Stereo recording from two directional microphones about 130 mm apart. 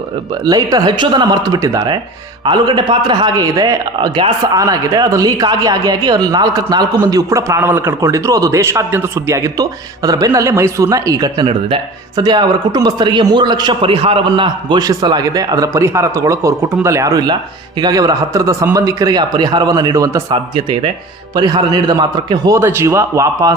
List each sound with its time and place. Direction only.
0.4 s a man's voice: 30° right (ahead or behind)
20.3 s a man's voice: 40° right (ahead or behind)